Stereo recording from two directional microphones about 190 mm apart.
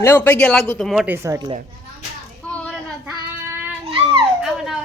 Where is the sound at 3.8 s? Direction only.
30° right (ahead or behind).